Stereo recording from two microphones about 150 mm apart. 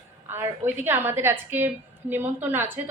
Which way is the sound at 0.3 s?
15° right (ahead or behind).